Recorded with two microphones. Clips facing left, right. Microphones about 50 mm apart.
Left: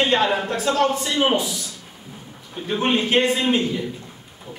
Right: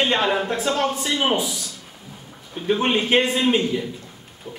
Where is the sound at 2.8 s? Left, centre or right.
Centre.